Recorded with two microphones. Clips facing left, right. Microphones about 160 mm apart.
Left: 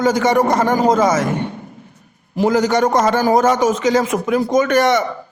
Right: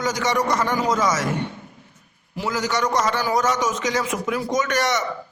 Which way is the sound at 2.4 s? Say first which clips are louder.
Left 9 dB; 50° left (ahead or behind).